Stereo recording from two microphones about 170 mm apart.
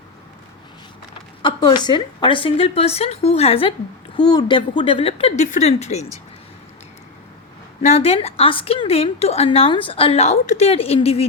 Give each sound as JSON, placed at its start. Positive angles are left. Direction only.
{"t": 1.4, "sound": "a woman's voice", "side_deg": 30}
{"t": 7.8, "sound": "a woman's voice", "side_deg": 40}